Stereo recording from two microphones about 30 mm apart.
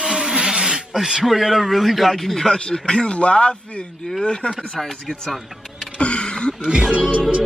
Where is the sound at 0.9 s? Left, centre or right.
Centre.